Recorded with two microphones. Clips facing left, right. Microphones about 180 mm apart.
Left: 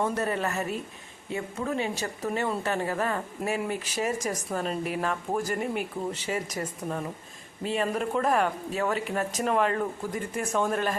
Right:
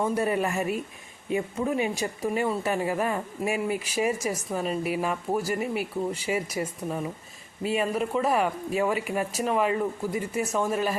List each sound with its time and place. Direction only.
0.0 s speech: 10° right (ahead or behind)